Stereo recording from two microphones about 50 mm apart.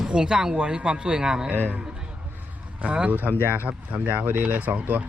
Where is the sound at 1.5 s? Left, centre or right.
Right.